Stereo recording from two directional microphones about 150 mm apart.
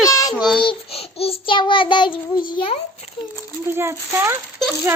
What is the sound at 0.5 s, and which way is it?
Child singing, 40° left (ahead or behind).